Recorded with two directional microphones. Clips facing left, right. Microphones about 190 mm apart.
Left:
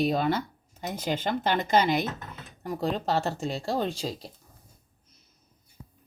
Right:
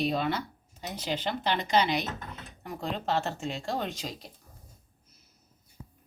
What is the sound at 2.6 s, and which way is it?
Speech, 40° left (ahead or behind).